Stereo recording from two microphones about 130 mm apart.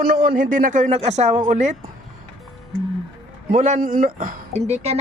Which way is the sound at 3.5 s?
70° right (ahead or behind).